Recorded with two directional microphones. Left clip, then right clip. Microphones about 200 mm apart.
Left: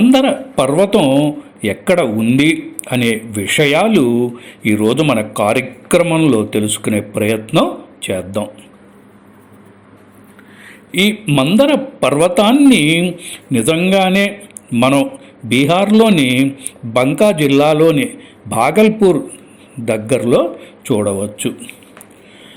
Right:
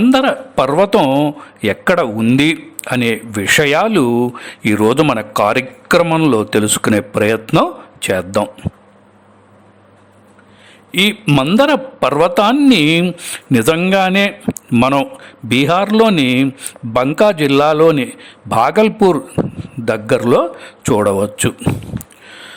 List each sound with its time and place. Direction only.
0.1 s a man's voice: 40° right (ahead or behind)
1.6 s a man's voice: 35° right (ahead or behind)
10.9 s a man's voice: 40° right (ahead or behind)